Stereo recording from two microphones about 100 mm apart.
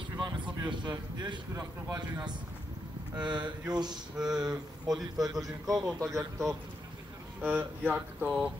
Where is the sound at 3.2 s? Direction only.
50° right (ahead or behind).